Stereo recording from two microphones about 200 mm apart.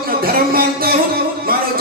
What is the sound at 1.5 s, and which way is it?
Music, 50° right (ahead or behind).